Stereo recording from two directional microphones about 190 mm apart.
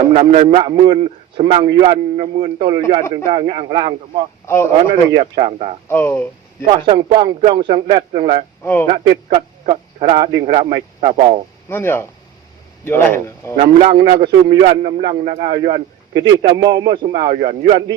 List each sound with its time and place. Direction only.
0.1 s a man's voice: 35° right (ahead or behind)
4.4 s a man's voice: 15° left (ahead or behind)
5.1 s a man's voice: 30° right (ahead or behind)
5.9 s speech: 10° left (ahead or behind)
6.7 s a man's voice: 25° right (ahead or behind)
8.6 s a man's voice: 10° left (ahead or behind)
9.3 s a man's voice: 25° right (ahead or behind)
11.7 s a man's voice: 10° left (ahead or behind)
13.6 s a man's voice: 30° right (ahead or behind)
15.6 s a man's voice: 25° right (ahead or behind)
17.3 s a man's voice: 40° right (ahead or behind)